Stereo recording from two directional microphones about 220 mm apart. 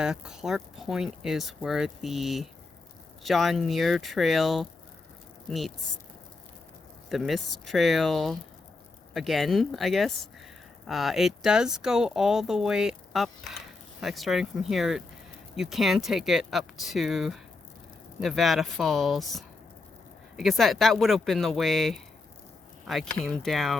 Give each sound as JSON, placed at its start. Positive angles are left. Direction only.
{"t": 0.0, "sound": "speech", "side_deg": -5}
{"t": 7.1, "sound": "speech", "side_deg": 0}